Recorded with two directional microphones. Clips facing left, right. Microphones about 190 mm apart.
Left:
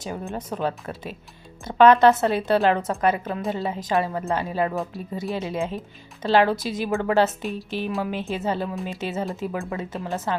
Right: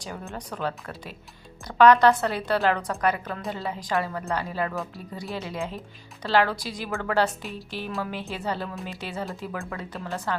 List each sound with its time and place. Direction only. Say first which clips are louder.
0.0 s a woman's voice: left 5 dB; 20° left (ahead or behind)